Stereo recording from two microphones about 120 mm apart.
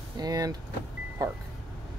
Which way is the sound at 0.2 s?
35° right (ahead or behind).